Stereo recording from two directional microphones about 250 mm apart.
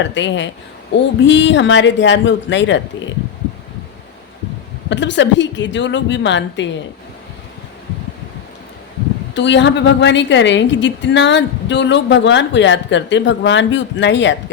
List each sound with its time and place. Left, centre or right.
0.0 s a woman's voice: left
4.9 s a woman's voice: left
9.3 s a woman's voice: left